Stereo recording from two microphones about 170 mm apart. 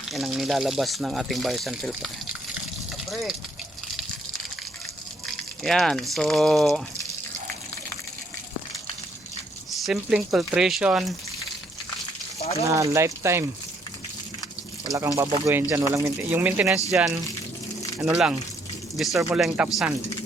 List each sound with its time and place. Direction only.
0.1 s speech: centre (ahead or behind)
3.1 s speech: centre (ahead or behind)
5.6 s speech: centre (ahead or behind)
9.8 s speech: 5° right (ahead or behind)
12.4 s a sound: 35° left (ahead or behind)
12.6 s speech: 20° right (ahead or behind)
14.9 s speech: 20° right (ahead or behind)